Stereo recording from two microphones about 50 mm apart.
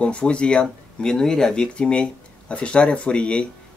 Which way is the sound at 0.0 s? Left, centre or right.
Left.